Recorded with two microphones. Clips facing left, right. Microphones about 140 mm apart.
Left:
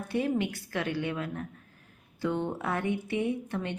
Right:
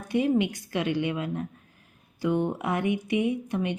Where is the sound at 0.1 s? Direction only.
15° right (ahead or behind).